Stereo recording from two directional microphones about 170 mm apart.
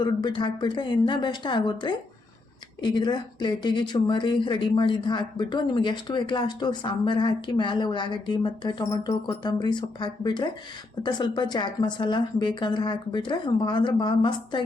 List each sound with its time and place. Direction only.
0.0 s speech: 25° left (ahead or behind)